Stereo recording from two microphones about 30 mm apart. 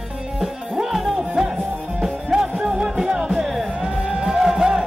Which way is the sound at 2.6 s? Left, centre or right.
Right.